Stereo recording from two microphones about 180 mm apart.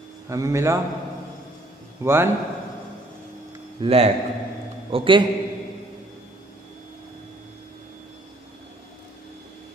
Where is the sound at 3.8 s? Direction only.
35° right (ahead or behind).